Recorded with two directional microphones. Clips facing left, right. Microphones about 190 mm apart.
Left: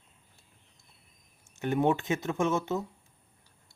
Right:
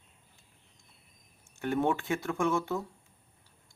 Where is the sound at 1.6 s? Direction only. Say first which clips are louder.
Left 2 dB; 20° left (ahead or behind).